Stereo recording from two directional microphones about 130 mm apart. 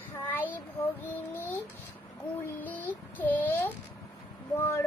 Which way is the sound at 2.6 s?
15° left (ahead or behind).